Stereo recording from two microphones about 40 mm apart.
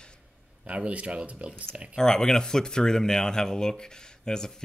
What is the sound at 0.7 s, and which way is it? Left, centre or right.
Speech, right.